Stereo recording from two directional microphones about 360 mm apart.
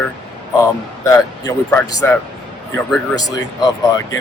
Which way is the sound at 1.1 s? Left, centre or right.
Centre.